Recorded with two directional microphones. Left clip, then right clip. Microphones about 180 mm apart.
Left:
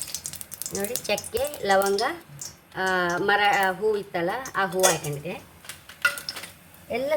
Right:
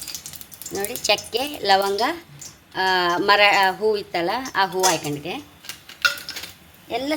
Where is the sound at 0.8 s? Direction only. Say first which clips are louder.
Right 6 dB; 30° right (ahead or behind).